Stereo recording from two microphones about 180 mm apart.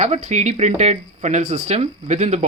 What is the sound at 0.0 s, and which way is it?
Speech, 40° right (ahead or behind).